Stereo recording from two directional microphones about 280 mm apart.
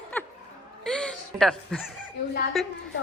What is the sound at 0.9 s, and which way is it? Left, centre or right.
Chuckle, centre.